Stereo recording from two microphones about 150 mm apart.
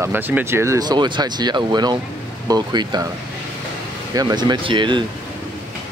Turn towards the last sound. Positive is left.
turn(degrees=-30)  # may be behind; listen again after turning